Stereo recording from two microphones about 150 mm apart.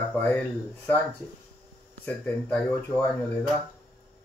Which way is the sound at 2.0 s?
10° left (ahead or behind).